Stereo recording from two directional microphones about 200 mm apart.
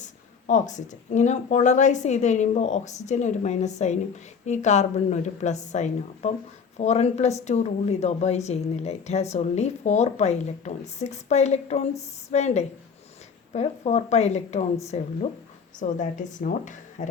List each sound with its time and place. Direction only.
0.0 s speech: 40° left (ahead or behind)